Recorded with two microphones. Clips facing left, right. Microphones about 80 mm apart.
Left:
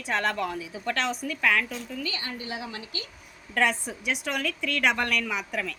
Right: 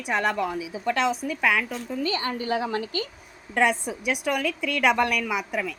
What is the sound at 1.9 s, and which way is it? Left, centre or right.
Speech, right.